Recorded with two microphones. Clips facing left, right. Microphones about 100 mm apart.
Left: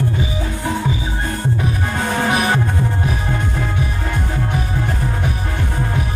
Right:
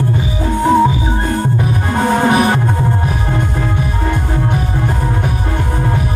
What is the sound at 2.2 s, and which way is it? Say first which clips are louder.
Music: right 3 dB; 25° right (ahead or behind).